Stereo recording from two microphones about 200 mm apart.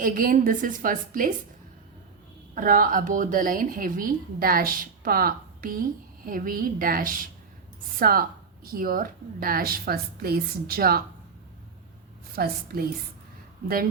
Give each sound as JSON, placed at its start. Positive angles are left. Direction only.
{"t": 0.0, "sound": "a woman's voice", "side_deg": -45}
{"t": 2.6, "sound": "a woman's voice", "side_deg": -45}
{"t": 12.4, "sound": "a woman's voice", "side_deg": -50}